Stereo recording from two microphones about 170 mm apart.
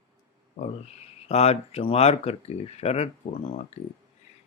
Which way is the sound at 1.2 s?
40° left (ahead or behind).